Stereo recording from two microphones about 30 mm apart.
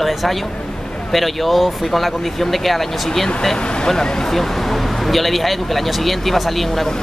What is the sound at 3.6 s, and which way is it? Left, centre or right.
Speech, left.